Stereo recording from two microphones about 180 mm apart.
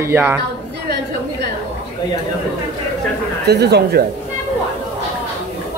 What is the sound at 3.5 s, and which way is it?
Speech, 65° right (ahead or behind).